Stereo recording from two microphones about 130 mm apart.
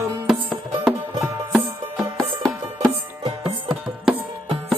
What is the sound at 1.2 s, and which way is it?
Music, centre (ahead or behind).